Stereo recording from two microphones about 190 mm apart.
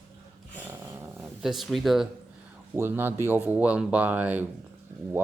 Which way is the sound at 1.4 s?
Centre (ahead or behind).